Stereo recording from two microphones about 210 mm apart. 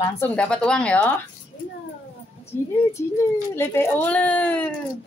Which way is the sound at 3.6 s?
10° left (ahead or behind).